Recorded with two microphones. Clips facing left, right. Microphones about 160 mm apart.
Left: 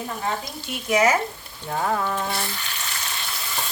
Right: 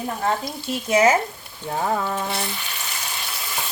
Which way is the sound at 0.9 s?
30° right (ahead or behind).